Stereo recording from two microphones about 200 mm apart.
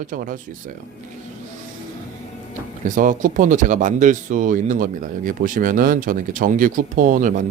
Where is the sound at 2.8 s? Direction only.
40° right (ahead or behind).